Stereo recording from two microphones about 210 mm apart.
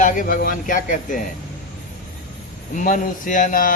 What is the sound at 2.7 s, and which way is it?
Speech, 40° left (ahead or behind).